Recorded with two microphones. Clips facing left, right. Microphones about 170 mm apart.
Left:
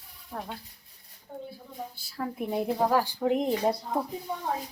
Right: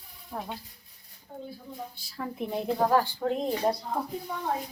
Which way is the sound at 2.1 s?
5° left (ahead or behind).